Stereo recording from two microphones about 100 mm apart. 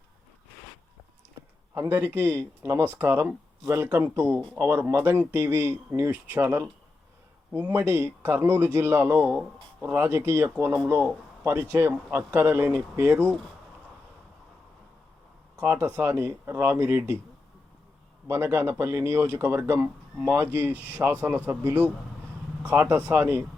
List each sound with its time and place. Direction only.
1.7 s speech: 30° right (ahead or behind)
15.5 s speech: 20° right (ahead or behind)
18.3 s speech: 25° right (ahead or behind)